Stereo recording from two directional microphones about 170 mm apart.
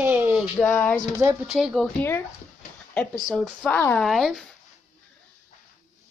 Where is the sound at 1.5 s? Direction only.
Centre (ahead or behind).